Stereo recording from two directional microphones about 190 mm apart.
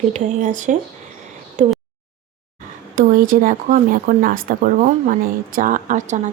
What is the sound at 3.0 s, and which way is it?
A woman's voice, 45° right (ahead or behind).